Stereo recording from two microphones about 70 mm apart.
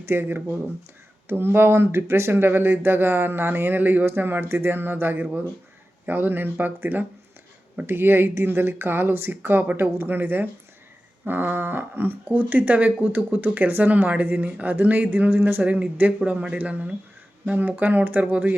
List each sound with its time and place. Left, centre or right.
0.0 s speech: right